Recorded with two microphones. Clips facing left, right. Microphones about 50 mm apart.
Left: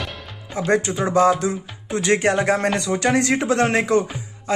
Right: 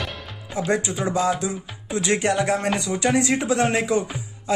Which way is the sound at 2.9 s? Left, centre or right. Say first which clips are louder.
Left 1 dB; left.